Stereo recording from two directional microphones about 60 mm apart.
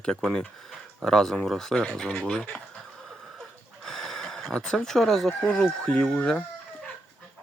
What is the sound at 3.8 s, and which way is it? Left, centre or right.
Speech, centre.